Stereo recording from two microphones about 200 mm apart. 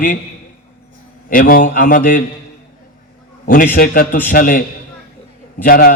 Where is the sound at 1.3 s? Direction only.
45° left (ahead or behind).